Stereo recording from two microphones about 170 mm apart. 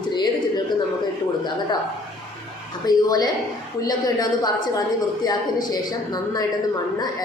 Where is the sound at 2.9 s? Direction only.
25° left (ahead or behind).